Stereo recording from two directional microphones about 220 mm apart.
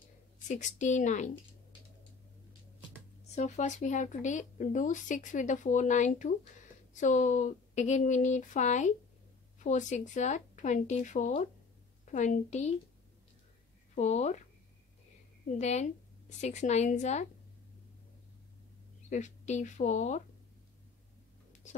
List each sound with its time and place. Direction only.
0.5 s speech: 35° left (ahead or behind)
3.3 s speech: 35° left (ahead or behind)
13.9 s speech: 30° left (ahead or behind)
15.6 s speech: 30° left (ahead or behind)
19.0 s speech: 35° left (ahead or behind)